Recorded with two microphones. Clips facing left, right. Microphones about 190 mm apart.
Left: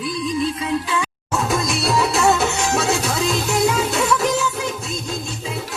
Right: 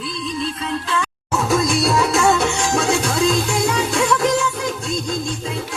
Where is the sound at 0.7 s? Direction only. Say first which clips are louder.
Left 1 dB; 5° left (ahead or behind).